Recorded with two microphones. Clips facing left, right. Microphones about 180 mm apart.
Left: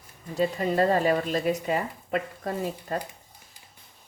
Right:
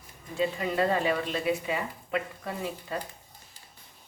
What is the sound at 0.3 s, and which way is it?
A woman's voice, 40° left (ahead or behind).